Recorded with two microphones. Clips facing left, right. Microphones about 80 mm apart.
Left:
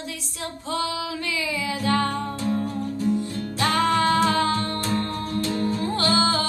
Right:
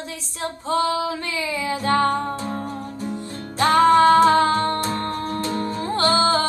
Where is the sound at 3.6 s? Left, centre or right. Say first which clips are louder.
Right 7 dB; right.